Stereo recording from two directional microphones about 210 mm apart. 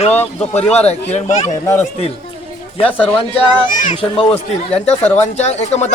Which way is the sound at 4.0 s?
25° left (ahead or behind).